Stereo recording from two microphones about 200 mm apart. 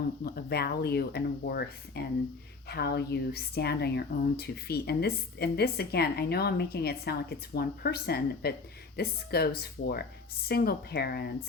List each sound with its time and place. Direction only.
0.3 s a woman's voice: 50° left (ahead or behind)